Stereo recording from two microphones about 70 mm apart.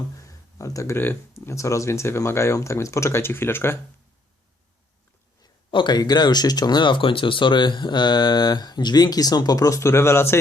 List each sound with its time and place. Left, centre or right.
0.2 s a sound: left
0.9 s speech: left
5.4 s speech: left